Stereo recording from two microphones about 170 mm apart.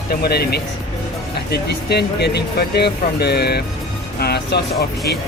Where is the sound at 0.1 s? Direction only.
65° left (ahead or behind).